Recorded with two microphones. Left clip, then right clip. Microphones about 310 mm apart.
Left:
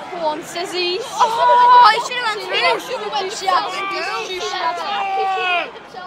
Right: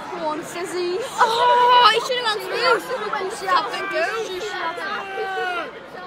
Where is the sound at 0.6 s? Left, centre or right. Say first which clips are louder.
Left 4 dB; left.